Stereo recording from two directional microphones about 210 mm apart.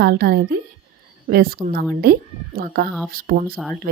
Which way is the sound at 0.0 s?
50° right (ahead or behind).